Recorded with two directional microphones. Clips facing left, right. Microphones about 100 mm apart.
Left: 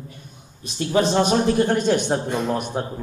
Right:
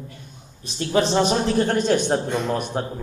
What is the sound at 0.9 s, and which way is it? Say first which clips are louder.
A man's voice: left 1 dB; 15° left (ahead or behind).